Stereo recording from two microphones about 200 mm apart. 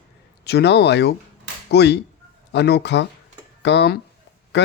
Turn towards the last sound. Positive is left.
turn(degrees=60)  # may be behind; listen again after turning